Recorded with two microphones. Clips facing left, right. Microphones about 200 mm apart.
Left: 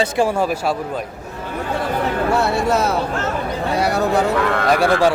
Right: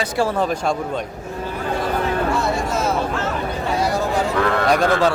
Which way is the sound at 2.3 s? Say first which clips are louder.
Left 4 dB; 65° left (ahead or behind).